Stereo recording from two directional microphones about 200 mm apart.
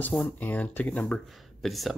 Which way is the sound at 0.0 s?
5° left (ahead or behind).